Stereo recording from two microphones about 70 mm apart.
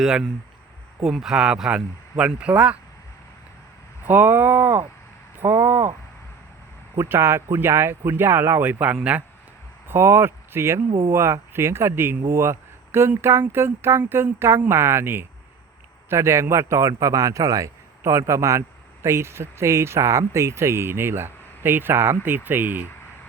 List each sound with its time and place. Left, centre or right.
0.0 s speech: centre
4.0 s speech: right
6.9 s speech: right
9.9 s a man's voice: right